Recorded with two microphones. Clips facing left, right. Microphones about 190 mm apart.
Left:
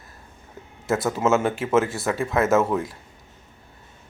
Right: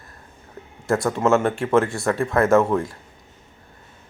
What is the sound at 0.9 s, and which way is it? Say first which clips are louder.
Speech: right 2 dB; 5° left (ahead or behind).